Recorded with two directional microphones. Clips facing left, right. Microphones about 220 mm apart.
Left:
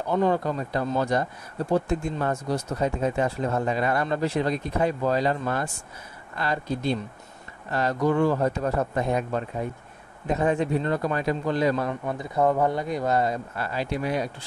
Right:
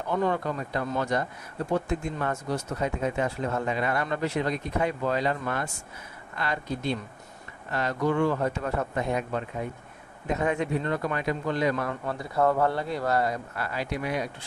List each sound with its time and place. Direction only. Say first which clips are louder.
0.1 s speech: left 3 dB; 35° left (ahead or behind)